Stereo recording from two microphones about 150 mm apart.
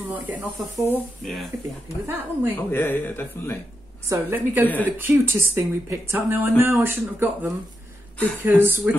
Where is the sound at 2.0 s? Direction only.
15° right (ahead or behind).